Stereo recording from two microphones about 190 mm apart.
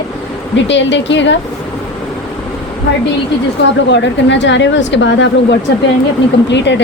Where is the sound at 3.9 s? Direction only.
70° left (ahead or behind).